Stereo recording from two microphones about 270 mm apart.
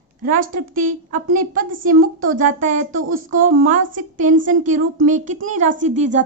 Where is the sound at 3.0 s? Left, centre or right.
Right.